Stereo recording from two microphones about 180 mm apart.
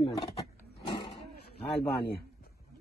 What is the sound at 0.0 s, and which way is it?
Roaring cats, 30° left (ahead or behind).